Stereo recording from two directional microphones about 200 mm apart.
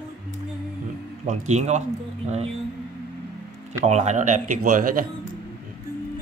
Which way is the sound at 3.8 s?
35° right (ahead or behind).